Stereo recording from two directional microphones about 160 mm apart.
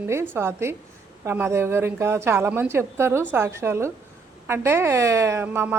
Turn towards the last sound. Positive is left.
turn(degrees=-15)  # may be behind; listen again after turning